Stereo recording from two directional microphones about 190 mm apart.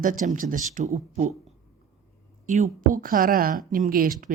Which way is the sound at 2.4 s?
40° right (ahead or behind).